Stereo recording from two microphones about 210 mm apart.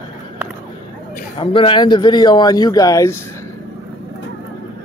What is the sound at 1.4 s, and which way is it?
A man's voice, 25° left (ahead or behind).